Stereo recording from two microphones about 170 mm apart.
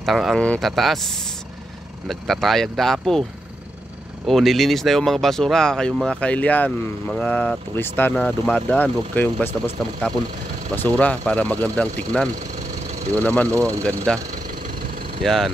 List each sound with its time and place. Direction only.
0.0 s speech: centre (ahead or behind)
4.3 s speech: centre (ahead or behind)
10.7 s speech: 10° left (ahead or behind)
13.5 s speech: 20° right (ahead or behind)
13.8 s speech: 5° left (ahead or behind)
15.2 s speech: centre (ahead or behind)